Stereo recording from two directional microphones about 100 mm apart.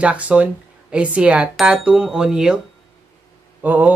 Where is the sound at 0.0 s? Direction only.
15° right (ahead or behind).